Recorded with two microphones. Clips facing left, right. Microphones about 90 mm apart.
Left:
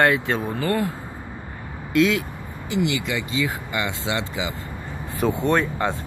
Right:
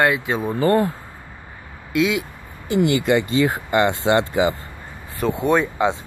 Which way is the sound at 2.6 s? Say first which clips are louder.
Right 6 dB; 45° right (ahead or behind).